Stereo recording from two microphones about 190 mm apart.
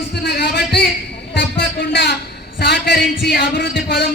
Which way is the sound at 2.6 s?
60° left (ahead or behind).